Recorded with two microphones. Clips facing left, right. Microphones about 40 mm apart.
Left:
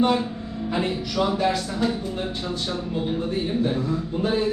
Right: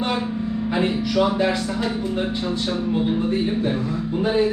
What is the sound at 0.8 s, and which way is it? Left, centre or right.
Speech, right.